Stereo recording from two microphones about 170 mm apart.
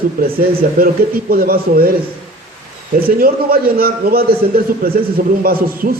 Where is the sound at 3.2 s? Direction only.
60° right (ahead or behind).